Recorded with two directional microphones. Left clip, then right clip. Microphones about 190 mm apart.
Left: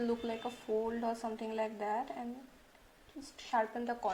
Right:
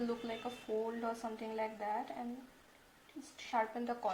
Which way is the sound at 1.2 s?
30° left (ahead or behind).